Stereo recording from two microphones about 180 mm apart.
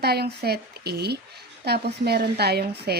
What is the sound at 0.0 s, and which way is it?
A woman's voice, 65° right (ahead or behind).